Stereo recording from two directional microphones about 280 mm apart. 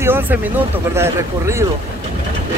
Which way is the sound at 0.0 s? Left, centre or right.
Centre.